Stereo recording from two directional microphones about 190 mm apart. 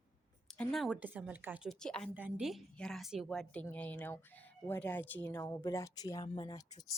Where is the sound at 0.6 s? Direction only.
Centre (ahead or behind).